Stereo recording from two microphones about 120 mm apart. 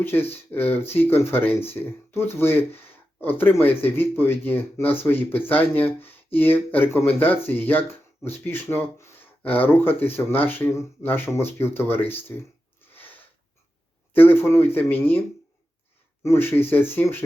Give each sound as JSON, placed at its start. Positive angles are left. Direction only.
{"t": 0.0, "sound": "speech", "side_deg": 20}
{"t": 14.1, "sound": "speech", "side_deg": 15}
{"t": 16.2, "sound": "speech", "side_deg": 20}